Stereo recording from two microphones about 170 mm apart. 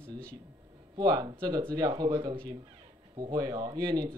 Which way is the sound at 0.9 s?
25° right (ahead or behind).